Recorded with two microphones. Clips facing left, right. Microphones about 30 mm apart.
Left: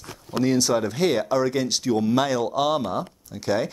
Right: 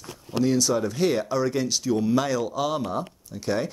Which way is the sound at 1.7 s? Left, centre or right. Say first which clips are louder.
Left 2 dB; left.